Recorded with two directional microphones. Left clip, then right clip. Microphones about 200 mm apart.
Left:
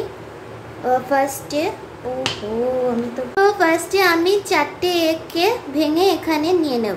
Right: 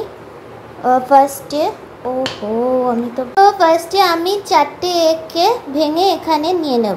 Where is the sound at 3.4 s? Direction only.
20° right (ahead or behind).